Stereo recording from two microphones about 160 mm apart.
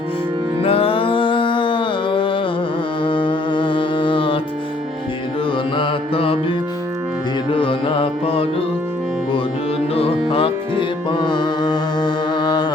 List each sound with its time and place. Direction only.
0.6 s music: 35° left (ahead or behind)
5.7 s music: 35° left (ahead or behind)
9.9 s music: 35° left (ahead or behind)